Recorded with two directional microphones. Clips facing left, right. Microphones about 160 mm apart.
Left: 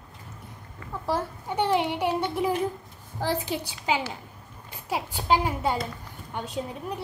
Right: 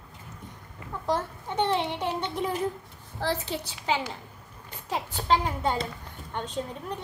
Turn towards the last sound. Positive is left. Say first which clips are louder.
# left 1 dB
turn(degrees=10)  # may be behind; listen again after turning